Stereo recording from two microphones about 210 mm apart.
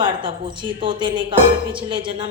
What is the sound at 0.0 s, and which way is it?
Speech, 20° right (ahead or behind).